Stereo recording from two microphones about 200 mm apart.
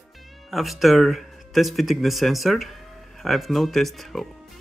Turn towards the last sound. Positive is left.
turn(degrees=0)  # may be behind; listen again after turning